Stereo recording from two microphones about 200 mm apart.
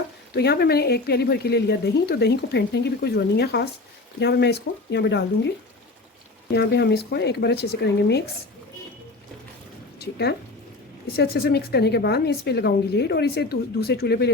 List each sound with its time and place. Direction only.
0.3 s speech: 55° left (ahead or behind)
6.5 s speech: 55° left (ahead or behind)
10.0 s speech: 55° left (ahead or behind)